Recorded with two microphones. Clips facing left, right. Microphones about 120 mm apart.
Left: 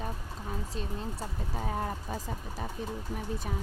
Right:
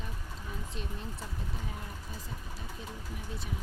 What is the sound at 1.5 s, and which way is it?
Speech, 55° left (ahead or behind).